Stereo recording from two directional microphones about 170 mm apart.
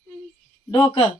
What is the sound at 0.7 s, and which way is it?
Speech, 30° left (ahead or behind).